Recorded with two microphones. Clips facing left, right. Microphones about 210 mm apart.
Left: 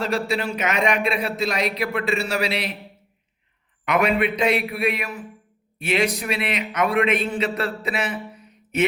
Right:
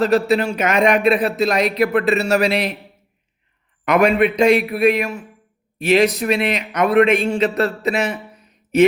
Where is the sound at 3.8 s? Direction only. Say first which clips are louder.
Right 6 dB; 45° right (ahead or behind).